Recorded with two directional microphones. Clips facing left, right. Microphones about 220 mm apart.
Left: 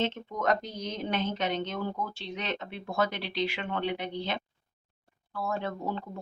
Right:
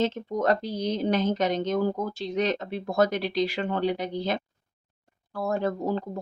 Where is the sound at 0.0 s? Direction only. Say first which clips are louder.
Right 5 dB; 40° right (ahead or behind).